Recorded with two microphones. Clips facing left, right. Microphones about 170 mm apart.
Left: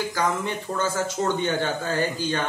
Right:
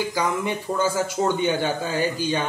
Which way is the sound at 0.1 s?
10° right (ahead or behind).